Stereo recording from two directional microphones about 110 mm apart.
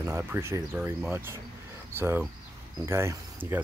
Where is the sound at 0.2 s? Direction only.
25° right (ahead or behind).